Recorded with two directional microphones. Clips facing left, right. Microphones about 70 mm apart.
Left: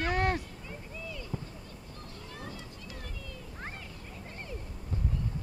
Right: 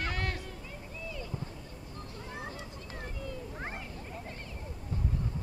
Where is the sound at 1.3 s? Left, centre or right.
Centre.